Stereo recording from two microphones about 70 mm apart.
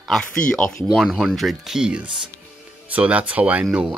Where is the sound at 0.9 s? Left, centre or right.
Centre.